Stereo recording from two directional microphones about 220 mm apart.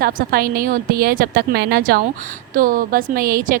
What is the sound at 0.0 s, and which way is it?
A woman's voice, 40° right (ahead or behind).